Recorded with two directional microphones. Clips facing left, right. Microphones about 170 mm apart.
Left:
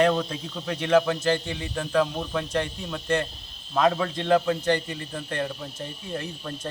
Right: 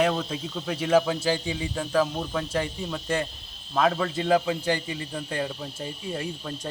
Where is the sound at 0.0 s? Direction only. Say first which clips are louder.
Left 2 dB; 5° right (ahead or behind).